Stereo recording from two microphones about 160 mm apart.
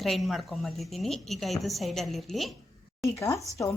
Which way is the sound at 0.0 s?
Centre (ahead or behind).